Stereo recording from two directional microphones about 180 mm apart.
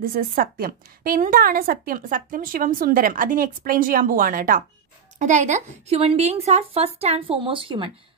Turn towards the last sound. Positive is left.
turn(degrees=-30)  # may be behind; listen again after turning